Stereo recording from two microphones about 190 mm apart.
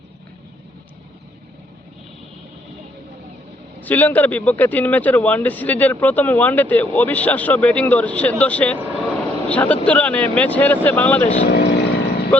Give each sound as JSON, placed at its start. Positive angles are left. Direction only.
{"t": 3.8, "sound": "speech", "side_deg": 10}
{"t": 11.4, "sound": "vehicle", "side_deg": 60}